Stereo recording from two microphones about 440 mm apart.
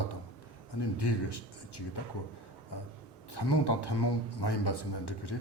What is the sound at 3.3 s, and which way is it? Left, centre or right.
Speech, left.